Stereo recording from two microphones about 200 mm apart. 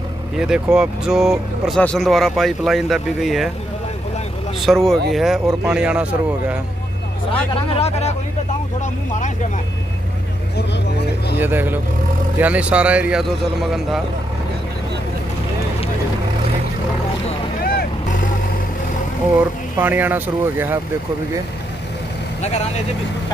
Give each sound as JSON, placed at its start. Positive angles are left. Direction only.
{"t": 0.4, "sound": "speech", "side_deg": -5}
{"t": 4.6, "sound": "speech", "side_deg": 0}
{"t": 7.2, "sound": "speech", "side_deg": 25}
{"t": 11.3, "sound": "speech", "side_deg": -10}
{"t": 17.6, "sound": "vehicle", "side_deg": 45}
{"t": 19.8, "sound": "speech", "side_deg": -10}